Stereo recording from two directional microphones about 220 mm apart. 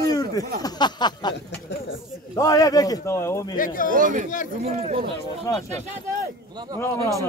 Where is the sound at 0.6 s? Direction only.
20° left (ahead or behind).